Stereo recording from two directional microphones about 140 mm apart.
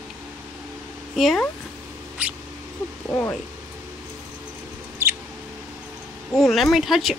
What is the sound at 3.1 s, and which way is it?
Speech, 15° left (ahead or behind).